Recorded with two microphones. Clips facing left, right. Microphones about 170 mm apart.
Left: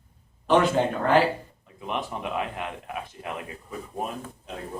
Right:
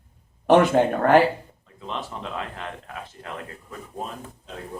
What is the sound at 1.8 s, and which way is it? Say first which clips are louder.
Speech: left 2 dB; 15° left (ahead or behind).